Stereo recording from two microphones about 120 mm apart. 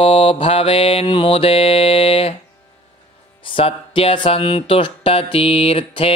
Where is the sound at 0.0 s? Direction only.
50° left (ahead or behind).